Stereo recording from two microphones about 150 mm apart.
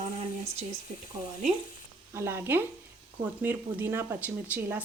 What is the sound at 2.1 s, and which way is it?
Speech, 15° right (ahead or behind).